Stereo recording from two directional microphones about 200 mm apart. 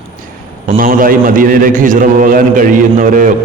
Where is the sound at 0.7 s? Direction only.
45° right (ahead or behind).